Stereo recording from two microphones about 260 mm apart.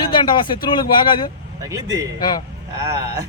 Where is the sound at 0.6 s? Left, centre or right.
Centre.